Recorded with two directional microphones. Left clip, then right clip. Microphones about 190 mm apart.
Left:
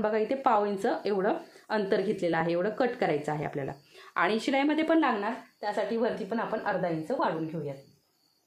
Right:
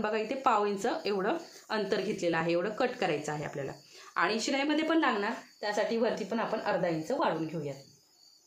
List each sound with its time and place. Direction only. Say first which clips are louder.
0.0 s speech: left 3 dB; 25° left (ahead or behind)
5.2 s a woman's voice: left 1 dB; 15° left (ahead or behind)